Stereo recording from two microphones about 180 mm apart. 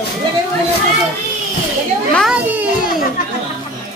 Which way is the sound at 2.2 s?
5° right (ahead or behind).